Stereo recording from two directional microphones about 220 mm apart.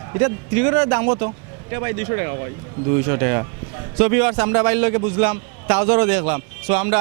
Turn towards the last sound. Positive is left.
turn(degrees=-10)  # may be behind; listen again after turning